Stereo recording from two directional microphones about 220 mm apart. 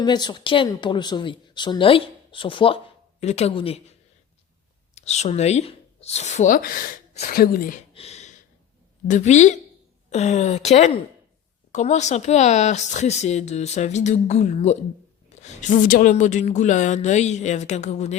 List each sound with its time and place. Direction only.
0.0 s speech: 20° left (ahead or behind)
4.9 s speech: 30° left (ahead or behind)
7.9 s a sound: 30° left (ahead or behind)
9.0 s speech: 35° left (ahead or behind)